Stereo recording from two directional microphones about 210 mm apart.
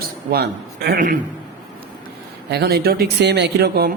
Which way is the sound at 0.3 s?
50° right (ahead or behind).